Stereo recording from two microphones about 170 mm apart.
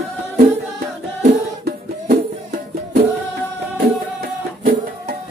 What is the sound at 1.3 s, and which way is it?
Music, 70° right (ahead or behind).